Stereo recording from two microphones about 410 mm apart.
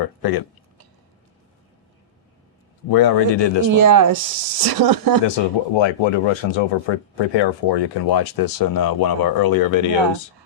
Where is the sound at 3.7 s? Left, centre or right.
Right.